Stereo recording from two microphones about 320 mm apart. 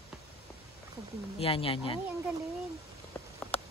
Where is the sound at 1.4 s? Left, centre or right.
Centre.